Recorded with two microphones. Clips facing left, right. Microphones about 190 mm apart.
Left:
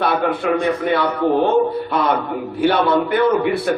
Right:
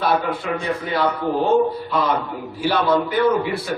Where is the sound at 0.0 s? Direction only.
55° left (ahead or behind).